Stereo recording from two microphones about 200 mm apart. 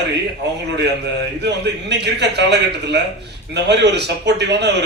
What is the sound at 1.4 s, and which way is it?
Speech, 55° right (ahead or behind).